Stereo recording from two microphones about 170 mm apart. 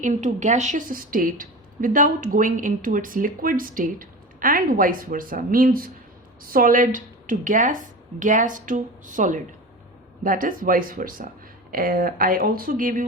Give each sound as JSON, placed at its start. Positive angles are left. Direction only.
{"t": 0.0, "sound": "a woman's voice", "side_deg": -45}